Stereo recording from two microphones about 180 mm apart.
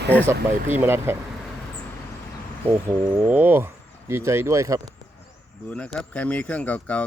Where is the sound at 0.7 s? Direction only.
15° right (ahead or behind).